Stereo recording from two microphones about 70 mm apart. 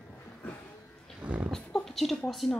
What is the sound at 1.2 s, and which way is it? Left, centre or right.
Dog, centre.